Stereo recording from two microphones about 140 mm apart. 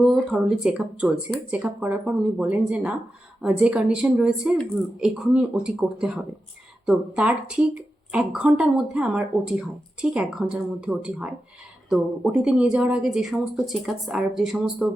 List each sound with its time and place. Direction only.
0.0 s speech: centre (ahead or behind)